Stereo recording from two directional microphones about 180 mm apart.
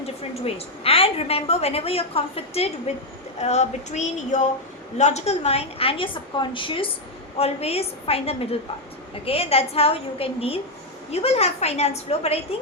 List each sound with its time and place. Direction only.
0.4 s a woman's voice: 35° left (ahead or behind)